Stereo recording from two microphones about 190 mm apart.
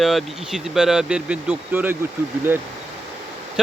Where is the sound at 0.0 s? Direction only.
Centre (ahead or behind).